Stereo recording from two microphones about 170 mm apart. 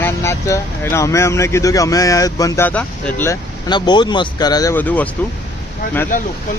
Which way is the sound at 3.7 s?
25° left (ahead or behind).